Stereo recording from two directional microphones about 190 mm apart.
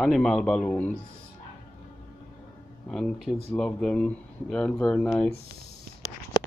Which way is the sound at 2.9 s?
Centre (ahead or behind).